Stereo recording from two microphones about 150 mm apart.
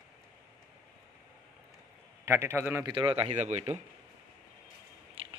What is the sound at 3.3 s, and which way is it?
Speech, 50° right (ahead or behind).